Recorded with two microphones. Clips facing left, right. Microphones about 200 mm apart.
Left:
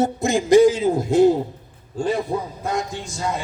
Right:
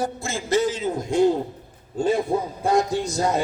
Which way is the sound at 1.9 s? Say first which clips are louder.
Right 1 dB; 25° right (ahead or behind).